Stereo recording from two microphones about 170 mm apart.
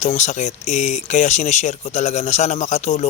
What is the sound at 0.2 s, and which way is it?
Speech, 45° left (ahead or behind).